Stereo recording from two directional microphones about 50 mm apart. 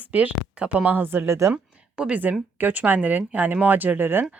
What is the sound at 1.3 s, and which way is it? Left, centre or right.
Speech, right.